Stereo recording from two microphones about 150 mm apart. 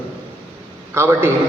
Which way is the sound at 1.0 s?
15° right (ahead or behind).